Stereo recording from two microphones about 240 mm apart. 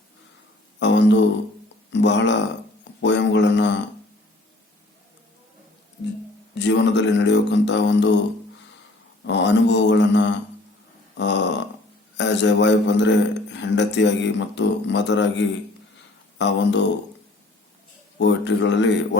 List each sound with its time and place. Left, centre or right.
0.8 s a sound: left
1.9 s a man's voice: left
6.5 s a man's voice: left
9.2 s a man's voice: left
18.2 s a man's voice: left